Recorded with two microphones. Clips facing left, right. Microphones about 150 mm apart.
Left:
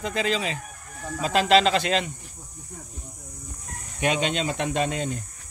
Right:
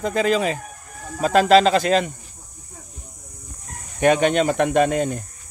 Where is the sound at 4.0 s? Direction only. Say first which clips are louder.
Right 8 dB; 50° right (ahead or behind).